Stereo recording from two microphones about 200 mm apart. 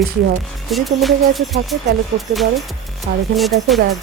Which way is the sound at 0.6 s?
Centre (ahead or behind).